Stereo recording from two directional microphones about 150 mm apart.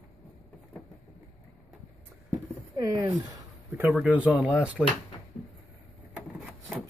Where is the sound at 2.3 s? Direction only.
20° right (ahead or behind).